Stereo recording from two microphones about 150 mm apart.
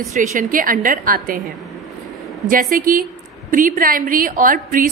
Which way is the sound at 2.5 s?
70° right (ahead or behind).